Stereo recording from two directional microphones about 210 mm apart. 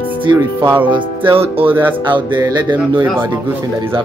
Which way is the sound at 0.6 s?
10° right (ahead or behind).